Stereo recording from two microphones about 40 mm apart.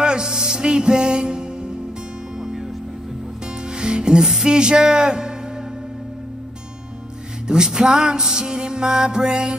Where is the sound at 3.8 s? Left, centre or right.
Right.